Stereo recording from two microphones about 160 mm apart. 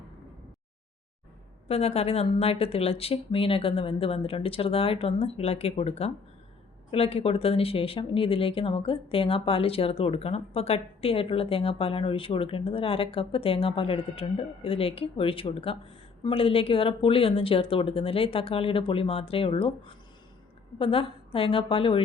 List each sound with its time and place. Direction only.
1.6 s speech: 40° left (ahead or behind)